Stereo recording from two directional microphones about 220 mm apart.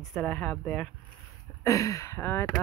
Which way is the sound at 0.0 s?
Centre (ahead or behind).